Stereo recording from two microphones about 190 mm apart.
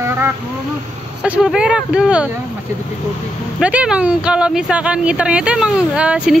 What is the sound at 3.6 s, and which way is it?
Speech, 5° right (ahead or behind).